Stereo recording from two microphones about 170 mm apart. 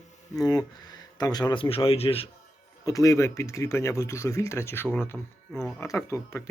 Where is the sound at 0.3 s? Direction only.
20° left (ahead or behind).